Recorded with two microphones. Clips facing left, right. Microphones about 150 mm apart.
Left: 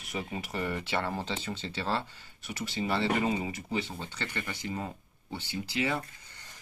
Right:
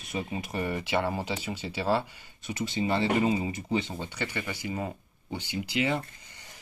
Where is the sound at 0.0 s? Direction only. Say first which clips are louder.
Right 3 dB; 20° right (ahead or behind).